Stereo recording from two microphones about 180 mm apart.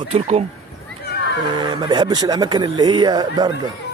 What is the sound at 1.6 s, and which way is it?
Speech, 25° right (ahead or behind).